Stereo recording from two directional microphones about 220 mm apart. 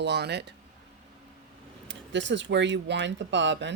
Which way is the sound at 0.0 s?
50° right (ahead or behind).